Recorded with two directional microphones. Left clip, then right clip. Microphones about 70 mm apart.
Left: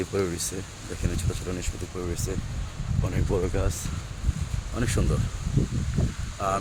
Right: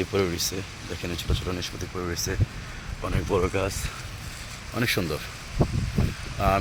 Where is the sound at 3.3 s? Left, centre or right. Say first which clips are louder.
Right 3 dB; centre.